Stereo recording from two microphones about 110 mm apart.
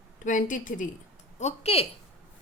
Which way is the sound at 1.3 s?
80° left.